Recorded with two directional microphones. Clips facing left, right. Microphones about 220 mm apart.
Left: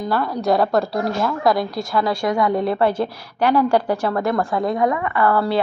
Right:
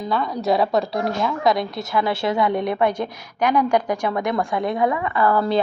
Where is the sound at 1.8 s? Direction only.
20° right (ahead or behind).